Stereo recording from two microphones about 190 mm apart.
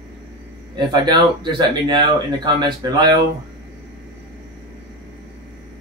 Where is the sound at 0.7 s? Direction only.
20° right (ahead or behind).